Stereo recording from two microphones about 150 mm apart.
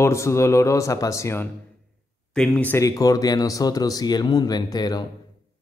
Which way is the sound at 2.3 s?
5° left (ahead or behind).